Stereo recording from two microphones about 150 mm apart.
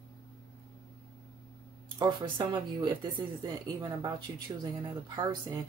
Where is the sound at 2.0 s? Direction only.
30° right (ahead or behind).